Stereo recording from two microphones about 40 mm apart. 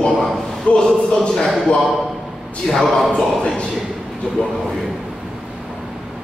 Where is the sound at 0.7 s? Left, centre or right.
Left.